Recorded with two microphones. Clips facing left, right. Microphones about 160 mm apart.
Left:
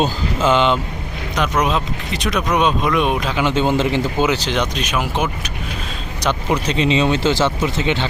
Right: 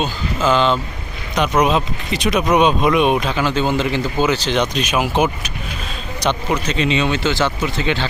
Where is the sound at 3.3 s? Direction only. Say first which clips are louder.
Left 1 dB; 20° left (ahead or behind).